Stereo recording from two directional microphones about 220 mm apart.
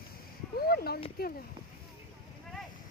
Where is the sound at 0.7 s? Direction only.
45° left (ahead or behind).